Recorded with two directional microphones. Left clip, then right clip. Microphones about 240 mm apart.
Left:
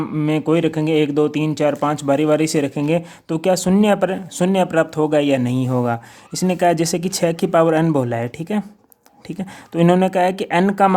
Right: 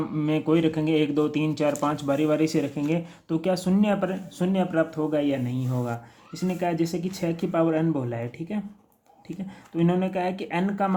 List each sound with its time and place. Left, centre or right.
0.0 s speech: left